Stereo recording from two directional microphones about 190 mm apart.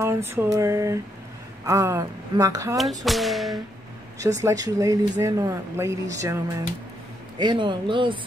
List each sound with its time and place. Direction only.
0.0 s speech: 15° right (ahead or behind)
3.1 s speech: centre (ahead or behind)
4.4 s speech: 15° right (ahead or behind)